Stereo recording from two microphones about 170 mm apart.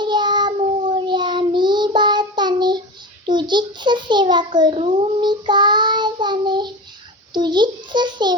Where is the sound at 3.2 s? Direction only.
25° right (ahead or behind).